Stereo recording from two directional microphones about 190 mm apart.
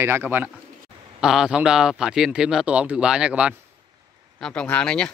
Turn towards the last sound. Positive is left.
turn(degrees=5)  # may be behind; listen again after turning